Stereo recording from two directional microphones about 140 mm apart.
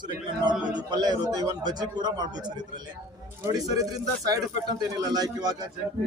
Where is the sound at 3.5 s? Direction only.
25° right (ahead or behind).